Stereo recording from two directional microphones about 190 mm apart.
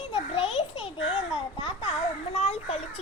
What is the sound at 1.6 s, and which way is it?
Babbling, 30° left (ahead or behind).